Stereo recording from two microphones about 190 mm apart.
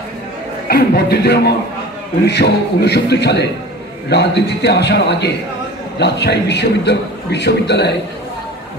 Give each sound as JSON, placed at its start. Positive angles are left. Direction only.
{"t": 0.7, "sound": "a man's voice", "side_deg": 55}